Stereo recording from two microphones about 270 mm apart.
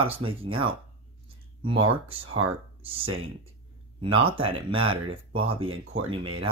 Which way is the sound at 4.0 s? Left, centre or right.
Centre.